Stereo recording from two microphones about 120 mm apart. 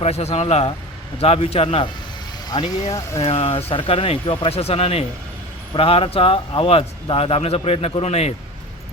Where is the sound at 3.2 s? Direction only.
55° left (ahead or behind).